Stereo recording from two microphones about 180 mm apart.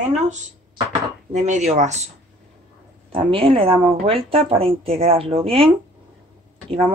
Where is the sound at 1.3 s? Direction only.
40° right (ahead or behind).